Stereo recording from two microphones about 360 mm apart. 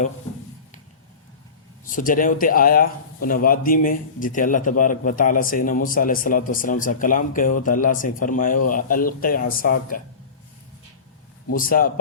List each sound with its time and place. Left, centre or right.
1.9 s a man's voice: left
11.5 s a man's voice: left